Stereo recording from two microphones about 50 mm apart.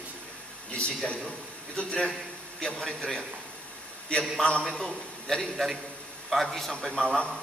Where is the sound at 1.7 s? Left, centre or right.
Centre.